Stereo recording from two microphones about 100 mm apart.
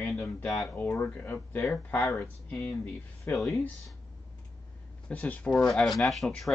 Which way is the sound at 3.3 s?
Centre (ahead or behind).